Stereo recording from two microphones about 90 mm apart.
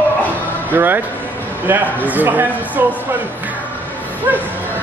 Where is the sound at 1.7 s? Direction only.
20° right (ahead or behind).